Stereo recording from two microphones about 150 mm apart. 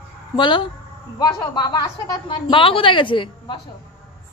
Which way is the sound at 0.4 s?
30° left (ahead or behind).